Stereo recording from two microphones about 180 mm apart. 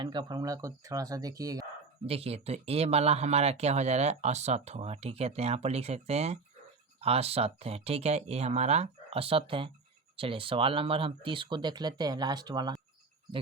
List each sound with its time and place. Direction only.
0.0 s speech: 25° right (ahead or behind)
2.0 s speech: 35° right (ahead or behind)